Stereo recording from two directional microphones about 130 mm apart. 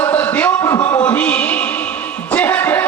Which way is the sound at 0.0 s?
15° left (ahead or behind).